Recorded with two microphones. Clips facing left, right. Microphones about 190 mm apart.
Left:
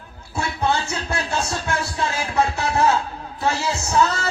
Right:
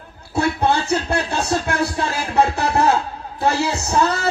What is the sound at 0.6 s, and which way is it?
Music, 35° right (ahead or behind).